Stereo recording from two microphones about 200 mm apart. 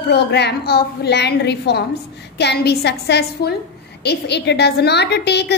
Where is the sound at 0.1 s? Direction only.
55° left (ahead or behind).